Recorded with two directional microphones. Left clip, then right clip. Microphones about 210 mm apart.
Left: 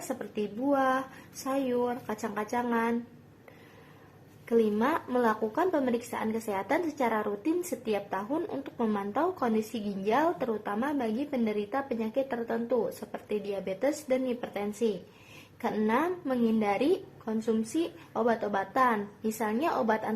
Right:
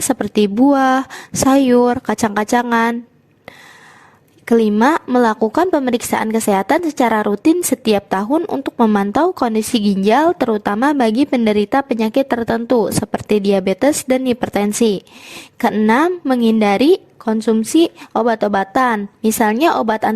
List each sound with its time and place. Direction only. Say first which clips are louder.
0.7 s a woman's voice: right 13 dB; 50° right (ahead or behind)
4.4 s a woman's voice: right 13 dB; 50° right (ahead or behind)
15.5 s a woman's voice: right 14 dB; 40° right (ahead or behind)